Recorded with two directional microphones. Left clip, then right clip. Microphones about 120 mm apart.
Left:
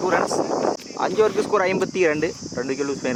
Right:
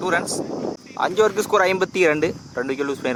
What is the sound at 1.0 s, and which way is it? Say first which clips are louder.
Speech: right 2 dB; 10° right (ahead or behind).